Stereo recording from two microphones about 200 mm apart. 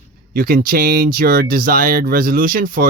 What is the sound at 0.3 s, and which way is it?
Speech, 45° right (ahead or behind).